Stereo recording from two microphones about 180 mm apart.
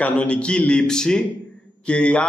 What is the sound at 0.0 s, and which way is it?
A man's voice, 5° left (ahead or behind).